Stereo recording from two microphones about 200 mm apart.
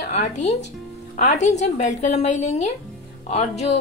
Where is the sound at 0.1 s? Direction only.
35° left (ahead or behind).